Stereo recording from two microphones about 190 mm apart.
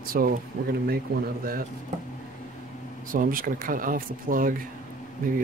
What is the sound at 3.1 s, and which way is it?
Speech, 45° right (ahead or behind).